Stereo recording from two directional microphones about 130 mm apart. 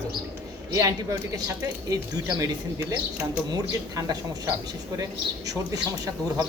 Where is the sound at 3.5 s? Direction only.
30° right (ahead or behind).